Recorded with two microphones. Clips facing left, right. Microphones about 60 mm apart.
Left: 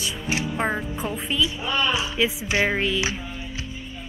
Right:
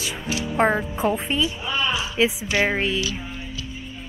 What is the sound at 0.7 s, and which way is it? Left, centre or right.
Speech, centre.